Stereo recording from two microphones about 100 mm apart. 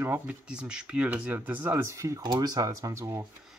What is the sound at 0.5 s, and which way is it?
Speech, 10° right (ahead or behind).